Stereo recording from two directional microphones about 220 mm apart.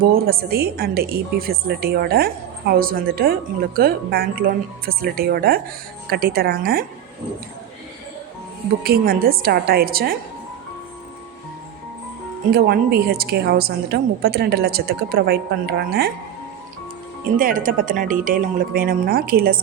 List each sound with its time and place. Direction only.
0.3 s a woman's voice: 45° right (ahead or behind)
8.8 s a woman's voice: 45° right (ahead or behind)
12.5 s a woman's voice: 45° right (ahead or behind)
17.3 s speech: 40° right (ahead or behind)